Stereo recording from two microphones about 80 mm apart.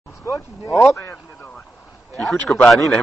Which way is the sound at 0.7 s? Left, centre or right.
Left.